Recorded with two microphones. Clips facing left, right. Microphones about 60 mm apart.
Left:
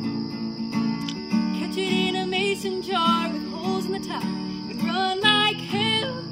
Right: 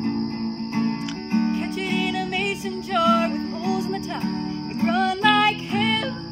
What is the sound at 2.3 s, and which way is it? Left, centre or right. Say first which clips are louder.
Music: left 1 dB; centre.